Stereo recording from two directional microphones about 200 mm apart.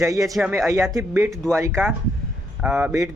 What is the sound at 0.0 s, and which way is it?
Speech, 15° right (ahead or behind).